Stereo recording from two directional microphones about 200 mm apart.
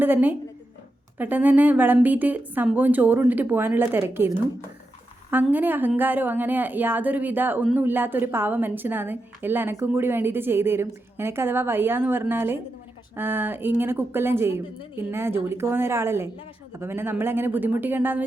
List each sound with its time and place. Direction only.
0.0 s a woman's voice: 10° right (ahead or behind)